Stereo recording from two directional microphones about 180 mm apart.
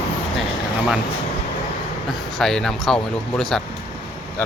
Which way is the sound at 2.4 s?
Centre (ahead or behind).